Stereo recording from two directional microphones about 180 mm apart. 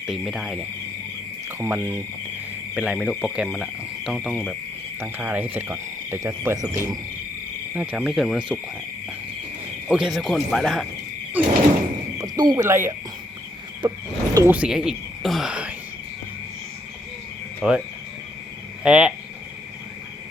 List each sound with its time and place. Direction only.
0.0 s speech: centre (ahead or behind)
1.5 s speech: 15° right (ahead or behind)
9.9 s speech: centre (ahead or behind)
11.4 s sliding door: 10° right (ahead or behind)
12.2 s speech: 20° right (ahead or behind)
13.8 s cricket: 20° right (ahead or behind)
14.3 s speech: 10° right (ahead or behind)
17.6 s speech: 5° right (ahead or behind)